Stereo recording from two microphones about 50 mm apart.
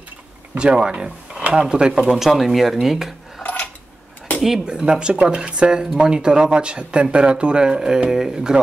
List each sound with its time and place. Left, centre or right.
0.6 s speech: centre
2.0 s speech: centre
4.6 s speech: centre